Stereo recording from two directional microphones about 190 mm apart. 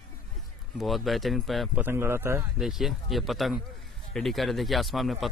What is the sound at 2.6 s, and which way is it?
Speech, centre (ahead or behind).